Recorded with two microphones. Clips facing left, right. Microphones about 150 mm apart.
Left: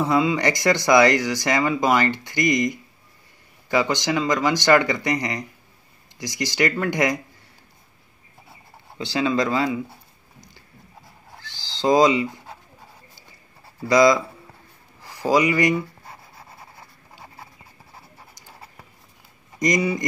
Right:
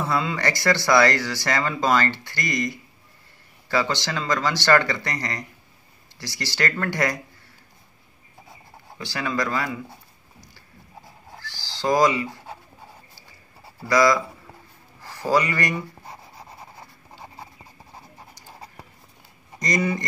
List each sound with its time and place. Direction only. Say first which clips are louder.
0.0 s speech: left 5 dB; 15° left (ahead or behind)
8.9 s speech: left 5 dB; 20° left (ahead or behind)
11.4 s a sound: left 4 dB; 20° left (ahead or behind)
13.8 s speech: left 3 dB; 20° left (ahead or behind)
19.6 s speech: left 3 dB; 15° left (ahead or behind)